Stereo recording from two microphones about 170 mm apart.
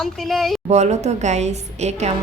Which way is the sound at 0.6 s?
40° right (ahead or behind).